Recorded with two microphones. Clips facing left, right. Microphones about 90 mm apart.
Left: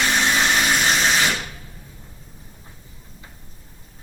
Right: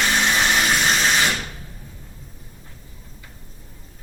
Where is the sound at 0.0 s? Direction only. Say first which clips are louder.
Even; centre (ahead or behind).